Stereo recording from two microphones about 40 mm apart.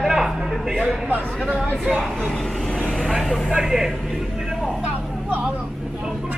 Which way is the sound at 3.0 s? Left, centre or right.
Centre.